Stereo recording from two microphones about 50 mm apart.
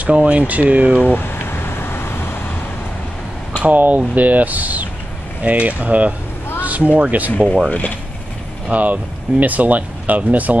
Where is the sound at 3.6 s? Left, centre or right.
Right.